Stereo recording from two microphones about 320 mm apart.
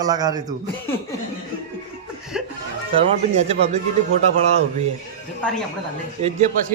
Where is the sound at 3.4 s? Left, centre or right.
Centre.